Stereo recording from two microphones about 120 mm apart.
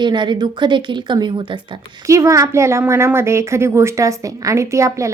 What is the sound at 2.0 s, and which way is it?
A woman's voice, 25° right (ahead or behind).